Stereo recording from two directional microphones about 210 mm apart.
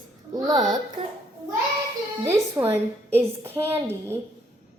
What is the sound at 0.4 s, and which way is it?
Speech, 20° right (ahead or behind).